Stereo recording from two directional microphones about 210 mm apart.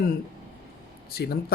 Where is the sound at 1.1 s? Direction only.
50° left (ahead or behind).